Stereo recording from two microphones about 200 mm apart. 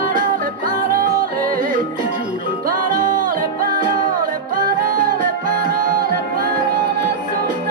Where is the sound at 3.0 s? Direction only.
40° right (ahead or behind).